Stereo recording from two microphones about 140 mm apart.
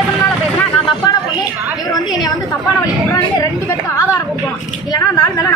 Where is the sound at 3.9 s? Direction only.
25° left (ahead or behind).